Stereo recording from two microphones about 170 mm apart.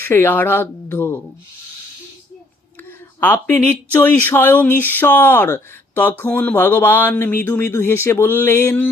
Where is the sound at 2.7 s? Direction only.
10° left (ahead or behind).